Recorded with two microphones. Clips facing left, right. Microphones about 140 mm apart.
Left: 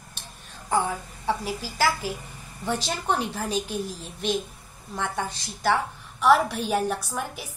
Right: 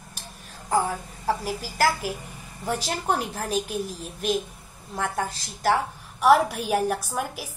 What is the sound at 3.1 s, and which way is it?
A woman's voice, centre (ahead or behind).